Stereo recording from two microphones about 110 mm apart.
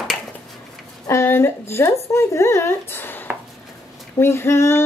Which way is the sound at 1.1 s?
25° left (ahead or behind).